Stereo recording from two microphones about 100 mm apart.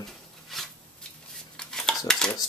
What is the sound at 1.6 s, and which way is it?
Stir, 5° left (ahead or behind).